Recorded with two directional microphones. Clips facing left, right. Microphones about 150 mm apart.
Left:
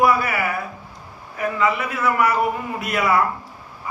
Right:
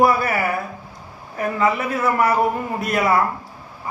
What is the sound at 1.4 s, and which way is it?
A man's voice, 40° right (ahead or behind).